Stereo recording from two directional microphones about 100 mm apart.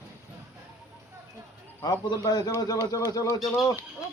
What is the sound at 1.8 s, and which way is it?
Speech, 40° left (ahead or behind).